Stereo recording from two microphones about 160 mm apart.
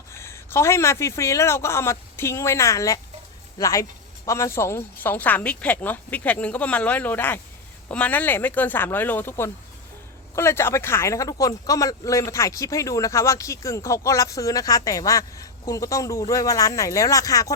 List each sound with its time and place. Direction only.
0.1 s a man's voice: 15° left (ahead or behind)